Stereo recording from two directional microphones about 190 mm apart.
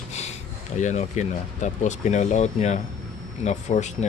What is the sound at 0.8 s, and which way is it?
Speech, 40° left (ahead or behind).